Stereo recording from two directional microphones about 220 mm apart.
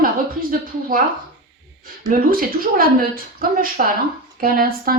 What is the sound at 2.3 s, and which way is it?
A woman's voice, 40° right (ahead or behind).